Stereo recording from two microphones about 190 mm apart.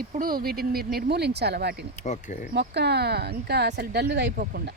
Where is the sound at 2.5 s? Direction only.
60° right (ahead or behind).